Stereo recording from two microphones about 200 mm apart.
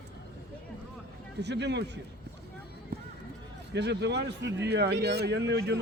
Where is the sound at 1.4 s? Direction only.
60° right (ahead or behind).